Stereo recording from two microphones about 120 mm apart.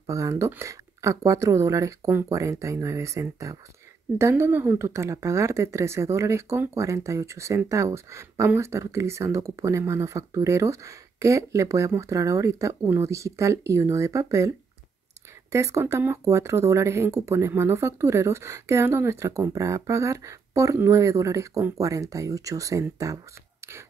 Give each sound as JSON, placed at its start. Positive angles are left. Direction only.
{"t": 0.0, "sound": "speech", "side_deg": -25}
{"t": 15.5, "sound": "speech", "side_deg": -25}